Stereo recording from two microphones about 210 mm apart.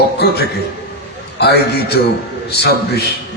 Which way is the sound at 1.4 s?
50° left (ahead or behind).